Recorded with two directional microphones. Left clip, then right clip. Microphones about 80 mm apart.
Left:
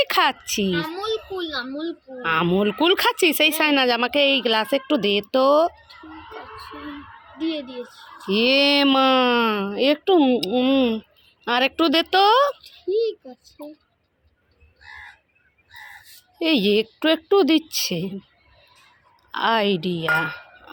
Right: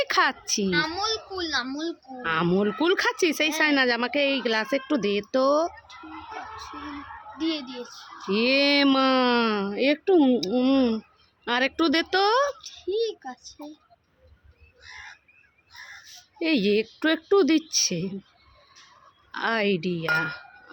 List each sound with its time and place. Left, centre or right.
0.0 s a child's voice: centre
0.8 s a child's voice: right
1.6 s a child's voice: right
2.2 s speech: centre
8.3 s speech: centre
9.3 s speech: right
9.6 s speech: centre
11.4 s speech: centre
12.6 s a child's voice: right
16.4 s speech: centre
17.0 s speech: centre
19.3 s speech: centre